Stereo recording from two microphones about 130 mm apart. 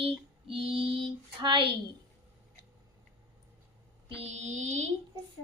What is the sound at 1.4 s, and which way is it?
Speech, 40° right (ahead or behind).